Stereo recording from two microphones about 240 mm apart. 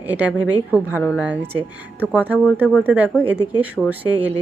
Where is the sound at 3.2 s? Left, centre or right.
Centre.